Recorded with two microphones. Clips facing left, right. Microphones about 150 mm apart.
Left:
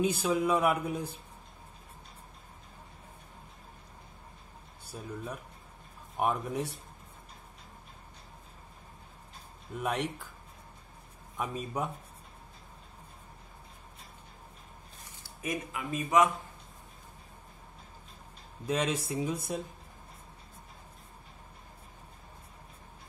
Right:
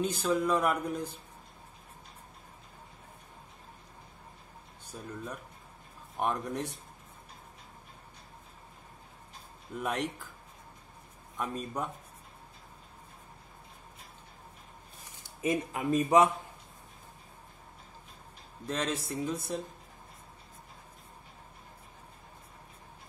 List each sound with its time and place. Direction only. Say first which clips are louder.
0.0 s speech: left 1 dB; 10° left (ahead or behind)
4.9 s speech: left 1 dB; 5° left (ahead or behind)
9.8 s speech: left 1 dB; centre (ahead or behind)
11.3 s speech: left 1 dB; 5° left (ahead or behind)
15.7 s speech: right 3 dB; 35° right (ahead or behind)
18.7 s speech: left 3 dB; 10° left (ahead or behind)